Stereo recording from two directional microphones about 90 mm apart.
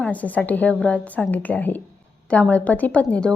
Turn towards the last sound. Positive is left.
turn(degrees=15)  # may be behind; listen again after turning